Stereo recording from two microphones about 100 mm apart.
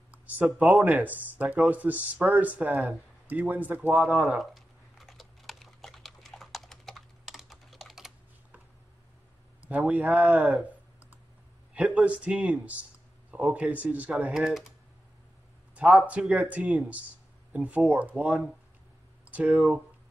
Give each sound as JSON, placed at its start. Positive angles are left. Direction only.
{"t": 0.6, "sound": "speech", "side_deg": -15}
{"t": 4.0, "sound": "typing", "side_deg": -5}
{"t": 9.7, "sound": "speech", "side_deg": -15}
{"t": 14.3, "sound": "speech", "side_deg": -5}
{"t": 16.1, "sound": "speech", "side_deg": -10}
{"t": 19.4, "sound": "speech", "side_deg": 0}